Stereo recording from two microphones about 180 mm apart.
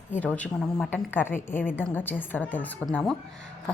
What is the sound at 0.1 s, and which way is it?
A woman's voice, 10° left (ahead or behind).